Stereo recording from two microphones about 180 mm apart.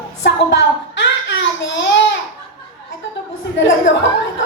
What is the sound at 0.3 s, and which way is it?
Child singing, 80° left.